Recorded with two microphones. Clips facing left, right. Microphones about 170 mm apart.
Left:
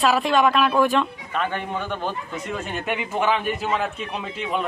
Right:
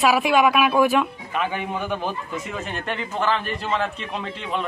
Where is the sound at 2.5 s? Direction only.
5° left (ahead or behind).